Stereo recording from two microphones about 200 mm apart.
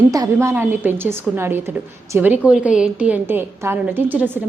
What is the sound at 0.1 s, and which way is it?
A woman's voice, 15° right (ahead or behind).